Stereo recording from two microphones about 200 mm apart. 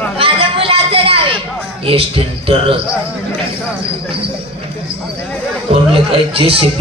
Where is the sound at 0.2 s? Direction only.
30° right (ahead or behind).